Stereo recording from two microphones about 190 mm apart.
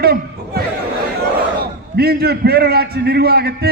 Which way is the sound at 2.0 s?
55° right (ahead or behind).